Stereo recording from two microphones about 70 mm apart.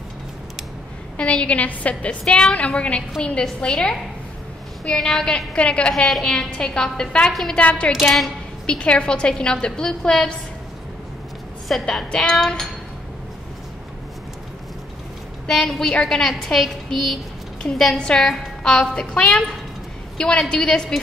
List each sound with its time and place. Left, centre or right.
1.1 s a woman's voice: centre
7.5 s a woman's voice: centre
7.9 s a woman's voice: centre
8.6 s a woman's voice: centre
11.7 s a woman's voice: centre
15.4 s a woman's voice: centre